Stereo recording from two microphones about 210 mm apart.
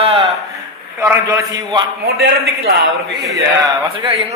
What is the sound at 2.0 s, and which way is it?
Speech, 50° right (ahead or behind).